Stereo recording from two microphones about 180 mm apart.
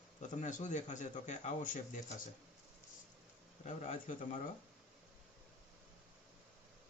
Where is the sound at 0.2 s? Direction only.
45° left (ahead or behind).